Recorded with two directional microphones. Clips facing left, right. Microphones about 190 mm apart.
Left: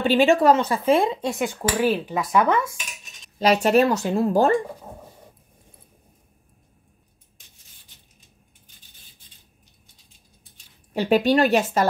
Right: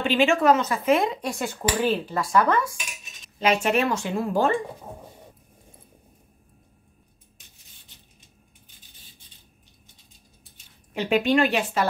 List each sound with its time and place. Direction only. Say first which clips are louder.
0.0 s speech: left 3 dB; 35° left (ahead or behind)
3.3 s a woman's voice: left 5 dB; 40° left (ahead or behind)
10.9 s a woman's voice: left 3 dB; 35° left (ahead or behind)